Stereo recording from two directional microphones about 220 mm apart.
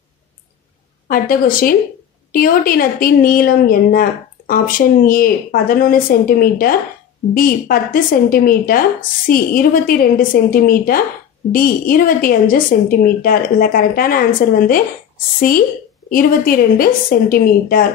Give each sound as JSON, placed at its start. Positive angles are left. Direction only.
{"t": 1.0, "sound": "a woman's voice", "side_deg": 40}
{"t": 16.1, "sound": "a woman's voice", "side_deg": 40}